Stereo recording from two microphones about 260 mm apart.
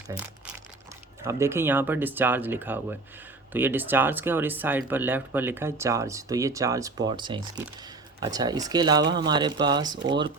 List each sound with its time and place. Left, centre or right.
0.1 s crumpling: centre
1.2 s speech: centre